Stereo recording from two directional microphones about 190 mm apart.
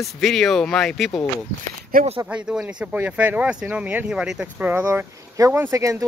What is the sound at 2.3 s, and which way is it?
Speech, 5° right (ahead or behind).